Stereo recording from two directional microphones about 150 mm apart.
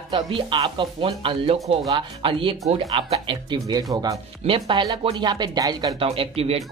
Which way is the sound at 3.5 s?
25° right (ahead or behind).